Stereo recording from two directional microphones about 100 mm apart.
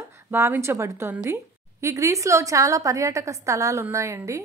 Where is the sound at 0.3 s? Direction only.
25° right (ahead or behind).